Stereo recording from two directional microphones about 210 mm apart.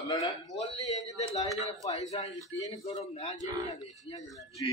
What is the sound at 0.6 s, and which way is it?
Speech, 30° left (ahead or behind).